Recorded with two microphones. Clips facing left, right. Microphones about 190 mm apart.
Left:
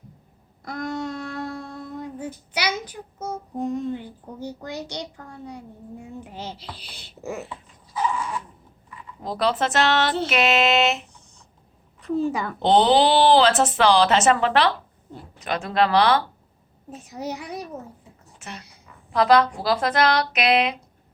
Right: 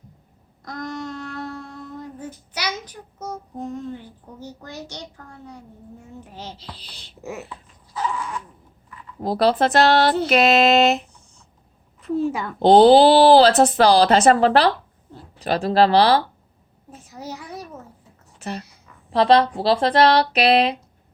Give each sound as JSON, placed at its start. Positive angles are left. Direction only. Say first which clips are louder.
{"t": 0.6, "sound": "a sound", "louder": "left 2 dB", "side_deg": 10}
{"t": 2.5, "sound": "a woman's voice", "louder": "left 2 dB", "side_deg": 10}
{"t": 7.0, "sound": "speech", "louder": "left 1 dB", "side_deg": 0}
{"t": 9.2, "sound": "speech", "louder": "right 5 dB", "side_deg": -35}
{"t": 12.1, "sound": "a woman's voice", "louder": "right 1 dB", "side_deg": 0}
{"t": 12.5, "sound": "speech", "louder": "right 7 dB", "side_deg": -35}
{"t": 16.9, "sound": "a woman's voice", "louder": "left 4 dB", "side_deg": 15}
{"t": 18.3, "sound": "speech", "louder": "right 9 dB", "side_deg": -35}